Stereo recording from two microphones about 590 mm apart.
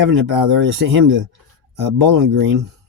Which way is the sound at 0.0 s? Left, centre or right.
Right.